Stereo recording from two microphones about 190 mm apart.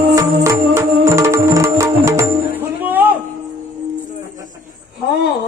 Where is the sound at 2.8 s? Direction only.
10° right (ahead or behind).